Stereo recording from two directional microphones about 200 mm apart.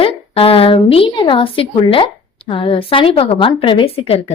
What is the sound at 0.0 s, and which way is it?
A woman's voice, 30° left (ahead or behind).